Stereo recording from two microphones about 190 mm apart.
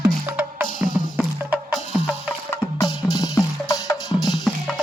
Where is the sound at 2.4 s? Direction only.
15° left (ahead or behind).